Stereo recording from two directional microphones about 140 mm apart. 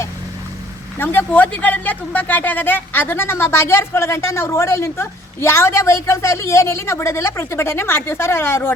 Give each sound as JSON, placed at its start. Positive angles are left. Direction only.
{"t": 0.9, "sound": "speech", "side_deg": 15}